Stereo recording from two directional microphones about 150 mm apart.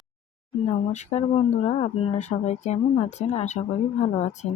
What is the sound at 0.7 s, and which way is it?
Speech, 50° left (ahead or behind).